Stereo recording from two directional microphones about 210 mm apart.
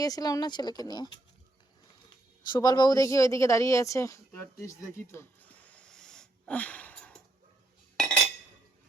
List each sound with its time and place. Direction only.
0.0 s speech: 15° left (ahead or behind)
2.5 s speech: 20° left (ahead or behind)
4.6 s a sound: 10° left (ahead or behind)
7.9 s cutlery: 5° left (ahead or behind)